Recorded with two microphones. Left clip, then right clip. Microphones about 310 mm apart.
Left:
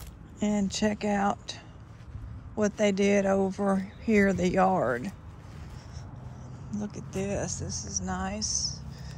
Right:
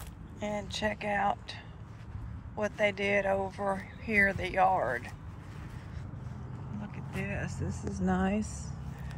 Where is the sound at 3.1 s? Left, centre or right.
Left.